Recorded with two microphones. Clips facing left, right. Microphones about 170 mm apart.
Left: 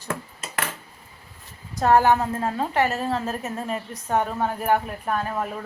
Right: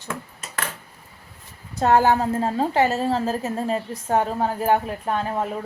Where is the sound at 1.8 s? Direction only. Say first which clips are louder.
Even; 30° right (ahead or behind).